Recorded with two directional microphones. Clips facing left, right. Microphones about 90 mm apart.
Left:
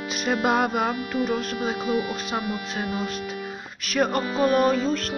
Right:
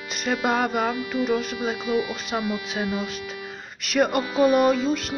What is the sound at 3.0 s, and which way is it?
Speech, centre (ahead or behind).